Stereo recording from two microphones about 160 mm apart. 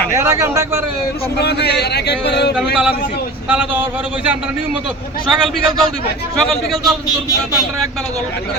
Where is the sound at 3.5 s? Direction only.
10° right (ahead or behind).